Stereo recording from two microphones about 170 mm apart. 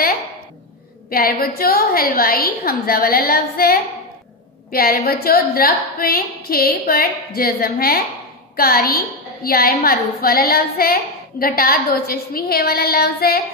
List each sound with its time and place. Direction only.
1.1 s a woman's voice: 60° left (ahead or behind)